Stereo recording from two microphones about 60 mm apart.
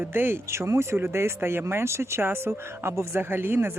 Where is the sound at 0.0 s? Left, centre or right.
Right.